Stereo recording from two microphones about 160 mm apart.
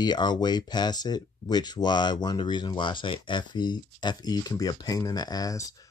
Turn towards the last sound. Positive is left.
turn(degrees=20)  # may be behind; listen again after turning